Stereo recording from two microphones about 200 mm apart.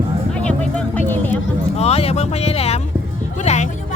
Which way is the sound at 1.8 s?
30° left (ahead or behind).